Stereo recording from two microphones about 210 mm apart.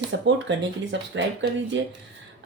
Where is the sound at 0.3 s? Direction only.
60° right (ahead or behind).